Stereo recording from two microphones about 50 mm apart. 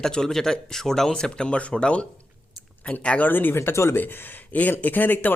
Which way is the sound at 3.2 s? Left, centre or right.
Left.